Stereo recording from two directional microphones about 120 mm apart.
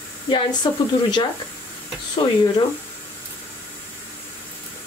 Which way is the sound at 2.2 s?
45° left (ahead or behind).